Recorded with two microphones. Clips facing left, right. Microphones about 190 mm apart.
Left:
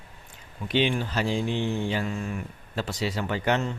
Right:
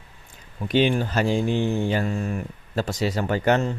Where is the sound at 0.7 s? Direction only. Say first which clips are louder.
Right 4 dB; 45° right (ahead or behind).